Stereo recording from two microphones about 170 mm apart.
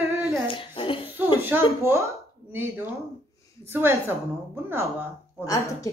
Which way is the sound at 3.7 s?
15° right (ahead or behind).